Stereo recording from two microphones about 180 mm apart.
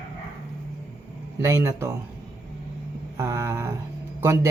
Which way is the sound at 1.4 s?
15° right (ahead or behind).